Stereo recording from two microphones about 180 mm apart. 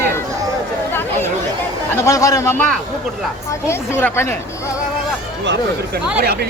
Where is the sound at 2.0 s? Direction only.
20° left (ahead or behind).